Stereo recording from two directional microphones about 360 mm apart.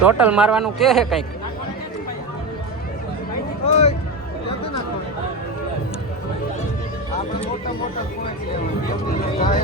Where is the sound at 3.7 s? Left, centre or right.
Centre.